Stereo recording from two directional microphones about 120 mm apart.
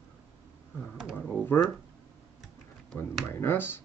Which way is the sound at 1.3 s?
15° left (ahead or behind).